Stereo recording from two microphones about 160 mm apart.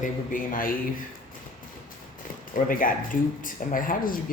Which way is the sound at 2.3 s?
60° left (ahead or behind).